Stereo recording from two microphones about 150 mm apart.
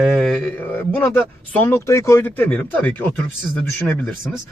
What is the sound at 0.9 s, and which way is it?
Speech, 15° left (ahead or behind).